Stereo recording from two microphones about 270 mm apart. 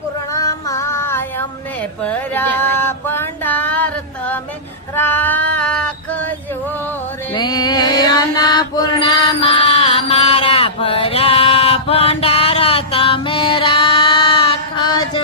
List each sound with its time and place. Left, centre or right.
0.3 s child singing: centre
2.0 s female singing: centre
7.3 s chant: centre